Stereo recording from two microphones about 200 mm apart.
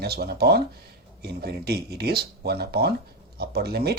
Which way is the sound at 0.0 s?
50° right (ahead or behind).